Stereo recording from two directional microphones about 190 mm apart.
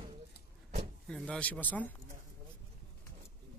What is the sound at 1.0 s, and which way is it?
Speech, 5° left (ahead or behind).